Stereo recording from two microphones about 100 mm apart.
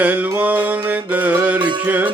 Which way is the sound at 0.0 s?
15° right (ahead or behind).